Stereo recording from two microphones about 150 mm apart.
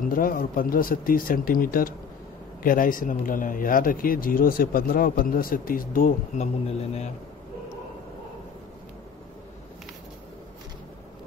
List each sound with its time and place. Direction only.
0.0 s speech: 70° left (ahead or behind)
6.3 s speech: 50° left (ahead or behind)